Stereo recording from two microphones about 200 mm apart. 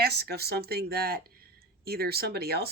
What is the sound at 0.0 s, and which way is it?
Speech, 55° right (ahead or behind).